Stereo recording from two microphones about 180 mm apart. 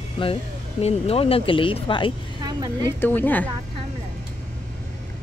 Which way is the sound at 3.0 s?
10° left (ahead or behind).